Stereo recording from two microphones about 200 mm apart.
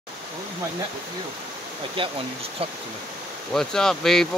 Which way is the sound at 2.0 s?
25° right (ahead or behind).